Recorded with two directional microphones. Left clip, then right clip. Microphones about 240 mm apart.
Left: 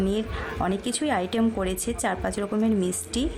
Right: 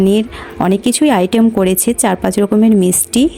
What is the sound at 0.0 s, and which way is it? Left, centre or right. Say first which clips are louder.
A woman's voice: right 13 dB; right.